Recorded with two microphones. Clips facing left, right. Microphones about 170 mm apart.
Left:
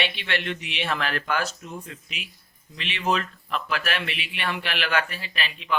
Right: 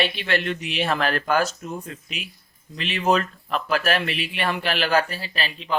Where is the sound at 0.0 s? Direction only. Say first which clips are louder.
Right 5 dB; 40° right (ahead or behind).